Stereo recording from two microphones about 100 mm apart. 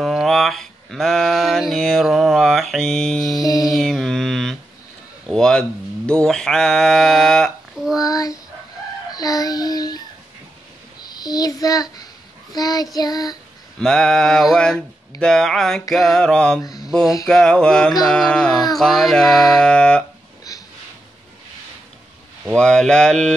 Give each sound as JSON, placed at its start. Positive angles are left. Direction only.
{"t": 0.0, "sound": "a sound", "side_deg": 0}
{"t": 3.3, "sound": "music", "side_deg": 35}
{"t": 3.6, "sound": "mantra", "side_deg": 0}
{"t": 5.3, "sound": "bleat", "side_deg": 5}
{"t": 8.0, "sound": "child singing", "side_deg": 35}
{"t": 9.1, "sound": "a sound", "side_deg": 40}
{"t": 11.1, "sound": "child singing", "side_deg": 40}
{"t": 13.7, "sound": "a sound", "side_deg": 5}
{"t": 16.8, "sound": "speech", "side_deg": -5}
{"t": 17.3, "sound": "mantra", "side_deg": 5}
{"t": 17.9, "sound": "a sound", "side_deg": 5}
{"t": 22.5, "sound": "mantra", "side_deg": 10}